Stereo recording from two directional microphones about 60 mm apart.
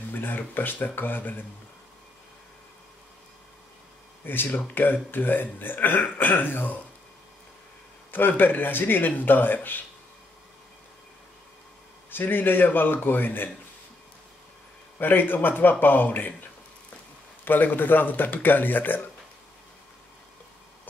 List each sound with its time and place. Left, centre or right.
0.1 s speech: left
4.3 s speech: left
8.1 s speech: left
12.1 s speech: left
15.0 s speech: left
17.5 s speech: left